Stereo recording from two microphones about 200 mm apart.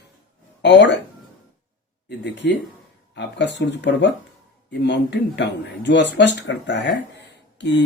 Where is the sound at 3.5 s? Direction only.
60° left (ahead or behind).